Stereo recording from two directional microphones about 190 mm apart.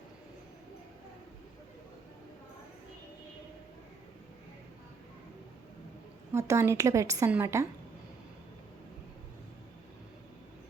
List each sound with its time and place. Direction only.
6.3 s a woman's voice: 15° right (ahead or behind)